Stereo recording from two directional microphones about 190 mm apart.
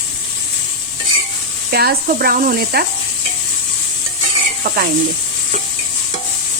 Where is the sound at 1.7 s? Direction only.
55° right (ahead or behind).